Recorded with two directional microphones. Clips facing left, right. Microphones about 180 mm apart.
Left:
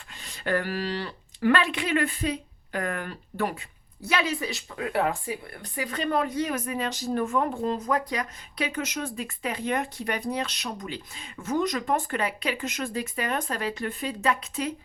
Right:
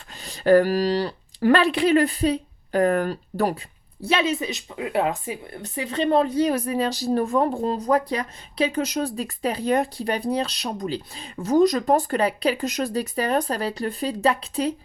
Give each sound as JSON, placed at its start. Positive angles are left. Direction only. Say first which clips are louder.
{"t": 0.1, "sound": "speech", "louder": "right 12 dB", "side_deg": -35}